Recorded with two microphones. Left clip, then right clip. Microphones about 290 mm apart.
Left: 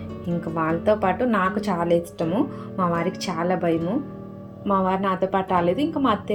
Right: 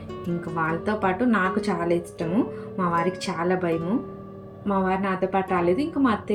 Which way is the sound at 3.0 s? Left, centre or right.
Centre.